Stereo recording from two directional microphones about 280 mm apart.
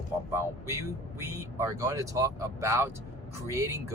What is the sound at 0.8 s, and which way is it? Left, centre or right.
Speech, centre.